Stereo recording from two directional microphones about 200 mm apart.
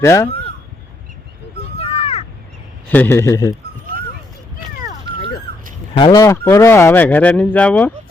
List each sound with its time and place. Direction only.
0.0 s speech: 15° left (ahead or behind)
1.8 s crow: 30° left (ahead or behind)
2.9 s speech: 10° left (ahead or behind)
5.1 s dog: 25° right (ahead or behind)
6.0 s speech: 20° left (ahead or behind)